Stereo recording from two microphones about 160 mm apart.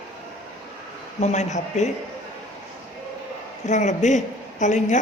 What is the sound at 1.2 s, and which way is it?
Speech, 45° left (ahead or behind).